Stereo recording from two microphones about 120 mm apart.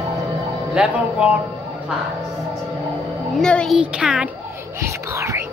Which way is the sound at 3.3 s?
5° left (ahead or behind).